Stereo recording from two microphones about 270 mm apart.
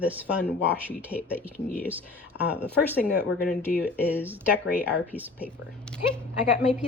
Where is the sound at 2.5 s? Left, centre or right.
Centre.